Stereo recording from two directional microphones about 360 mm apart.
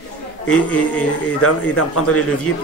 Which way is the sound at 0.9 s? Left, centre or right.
Left.